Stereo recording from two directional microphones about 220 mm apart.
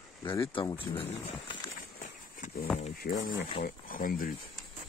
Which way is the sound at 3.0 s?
45° left (ahead or behind).